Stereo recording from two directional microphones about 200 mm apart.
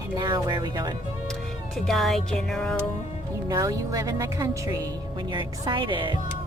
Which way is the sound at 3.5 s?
15° right (ahead or behind).